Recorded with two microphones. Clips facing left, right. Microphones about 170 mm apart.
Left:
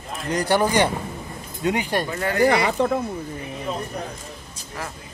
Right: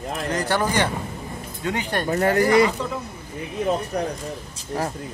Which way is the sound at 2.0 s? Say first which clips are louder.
Right 5 dB; 40° right (ahead or behind).